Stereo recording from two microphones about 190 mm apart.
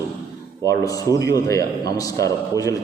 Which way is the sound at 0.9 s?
20° left (ahead or behind).